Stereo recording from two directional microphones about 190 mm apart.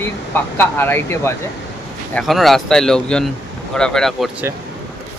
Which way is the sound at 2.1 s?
Centre (ahead or behind).